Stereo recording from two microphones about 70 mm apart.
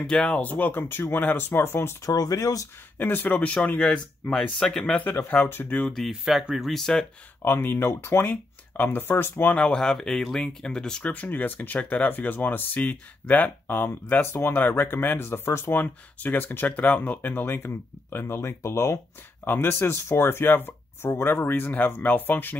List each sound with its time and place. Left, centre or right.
0.0 s speech: centre; by 2.0 s left
2.0 s speech: left
3.0 s speech: left
3.3 s speech: centre
4.9 s speech: left
5.9 s speech: centre
7.4 s speech: left
9.6 s speech: centre
11.1 s speech: left
15.7 s speech: left
19.4 s speech: left